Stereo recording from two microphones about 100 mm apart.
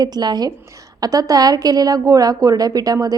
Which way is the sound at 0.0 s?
45° right (ahead or behind).